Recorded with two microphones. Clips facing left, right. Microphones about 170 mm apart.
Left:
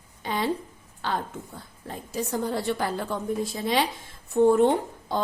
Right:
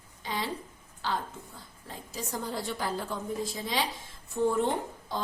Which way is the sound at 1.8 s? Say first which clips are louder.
Left 8 dB; 60° left (ahead or behind).